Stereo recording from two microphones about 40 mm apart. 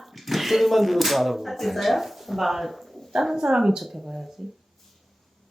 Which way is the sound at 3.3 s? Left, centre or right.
Centre.